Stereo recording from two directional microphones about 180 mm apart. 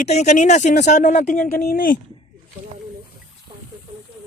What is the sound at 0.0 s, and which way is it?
Speech, 40° left (ahead or behind).